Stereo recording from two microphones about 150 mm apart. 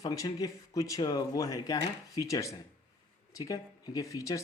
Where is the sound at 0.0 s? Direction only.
25° left (ahead or behind).